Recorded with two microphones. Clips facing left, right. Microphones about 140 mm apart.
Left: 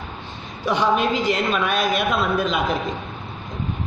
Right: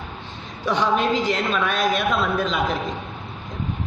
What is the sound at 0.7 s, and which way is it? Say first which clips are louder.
A woman's voice: left 1 dB; 5° left (ahead or behind).